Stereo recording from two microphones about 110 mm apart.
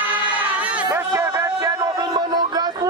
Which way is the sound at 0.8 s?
25° right (ahead or behind).